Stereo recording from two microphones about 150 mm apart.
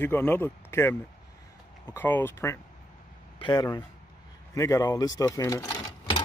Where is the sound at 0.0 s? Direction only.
10° left (ahead or behind).